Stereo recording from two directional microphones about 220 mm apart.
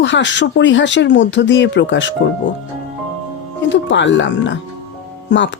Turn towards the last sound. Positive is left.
turn(degrees=55)  # may be behind; listen again after turning